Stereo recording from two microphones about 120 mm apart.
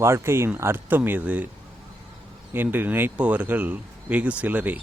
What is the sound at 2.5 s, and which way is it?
Speech, 15° right (ahead or behind).